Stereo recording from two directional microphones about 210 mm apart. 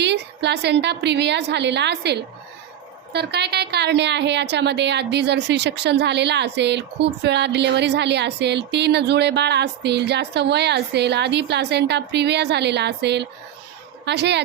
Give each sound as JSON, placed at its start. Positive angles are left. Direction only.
{"t": 0.0, "sound": "a woman's voice", "side_deg": -55}